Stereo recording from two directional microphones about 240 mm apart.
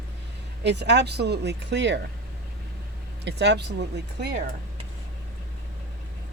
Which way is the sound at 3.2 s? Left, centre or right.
Right.